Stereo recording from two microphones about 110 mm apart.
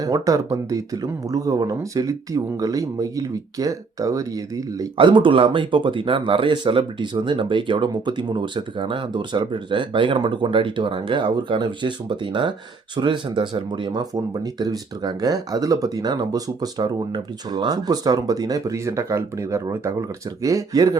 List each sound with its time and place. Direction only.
0.0 s speech: 30° right (ahead or behind)
4.9 s speech: 45° right (ahead or behind)